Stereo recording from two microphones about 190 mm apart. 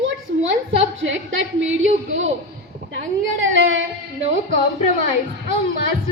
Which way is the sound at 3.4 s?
85° right.